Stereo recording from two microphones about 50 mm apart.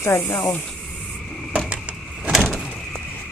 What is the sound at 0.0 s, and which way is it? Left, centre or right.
Speech, left.